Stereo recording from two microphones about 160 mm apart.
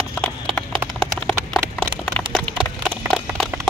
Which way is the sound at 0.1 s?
5° left (ahead or behind).